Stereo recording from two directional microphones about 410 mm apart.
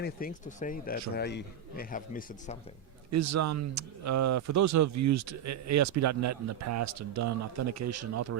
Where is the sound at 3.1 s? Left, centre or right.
Right.